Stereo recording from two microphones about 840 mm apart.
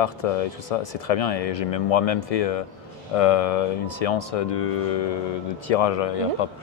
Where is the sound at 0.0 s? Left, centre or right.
Left.